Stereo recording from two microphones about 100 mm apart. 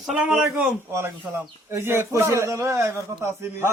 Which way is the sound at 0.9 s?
25° right (ahead or behind).